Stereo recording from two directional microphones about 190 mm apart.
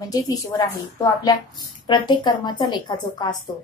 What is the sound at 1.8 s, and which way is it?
Speech, 25° left (ahead or behind).